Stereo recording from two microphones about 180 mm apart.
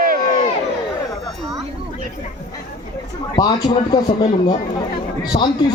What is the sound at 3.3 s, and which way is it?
Speech, 20° left (ahead or behind).